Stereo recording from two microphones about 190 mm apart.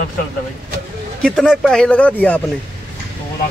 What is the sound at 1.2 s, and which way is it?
Speech, 5° left (ahead or behind).